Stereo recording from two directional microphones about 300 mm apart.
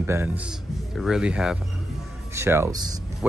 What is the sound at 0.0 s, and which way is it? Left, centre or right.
Speech, centre.